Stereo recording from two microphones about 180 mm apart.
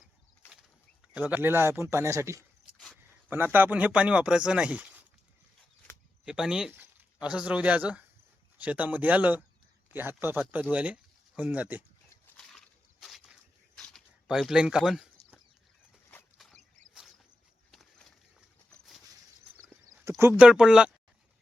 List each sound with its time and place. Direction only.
1.1 s speech: 10° right (ahead or behind)
6.2 s speech: 5° right (ahead or behind)
12.4 s a sound: centre (ahead or behind)
16.4 s a sound: centre (ahead or behind)
20.1 s speech: 15° right (ahead or behind)
20.5 s speech: 5° right (ahead or behind)